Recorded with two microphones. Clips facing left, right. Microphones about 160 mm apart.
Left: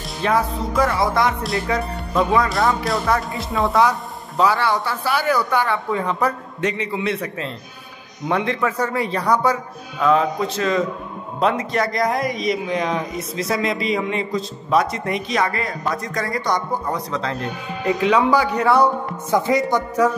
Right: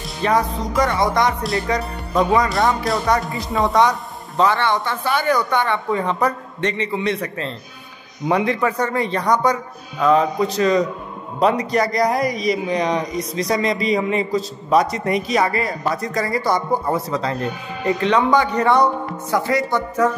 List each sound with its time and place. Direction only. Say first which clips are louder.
0.0 s speech: right 1 dB; centre (ahead or behind)
19.3 s speech: left 2 dB; 20° left (ahead or behind)